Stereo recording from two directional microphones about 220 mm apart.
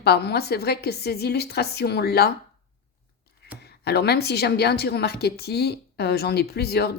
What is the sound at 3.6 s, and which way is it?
A woman's voice, 45° left (ahead or behind).